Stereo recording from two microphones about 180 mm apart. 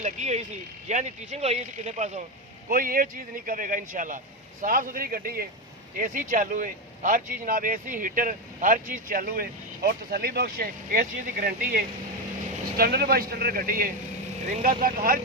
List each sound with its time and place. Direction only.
0.0 s speech: 40° right (ahead or behind)
2.6 s speech: 50° right (ahead or behind)